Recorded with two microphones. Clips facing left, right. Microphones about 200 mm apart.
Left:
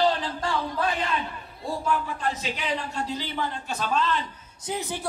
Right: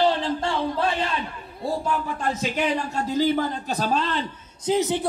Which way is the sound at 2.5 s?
50° right (ahead or behind).